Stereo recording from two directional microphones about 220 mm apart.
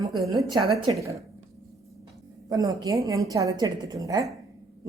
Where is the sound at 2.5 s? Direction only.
15° right (ahead or behind).